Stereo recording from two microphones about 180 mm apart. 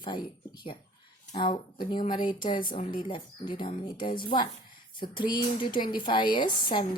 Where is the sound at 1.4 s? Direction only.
25° left (ahead or behind).